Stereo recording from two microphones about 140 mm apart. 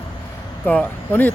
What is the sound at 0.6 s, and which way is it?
Speech, 10° left (ahead or behind).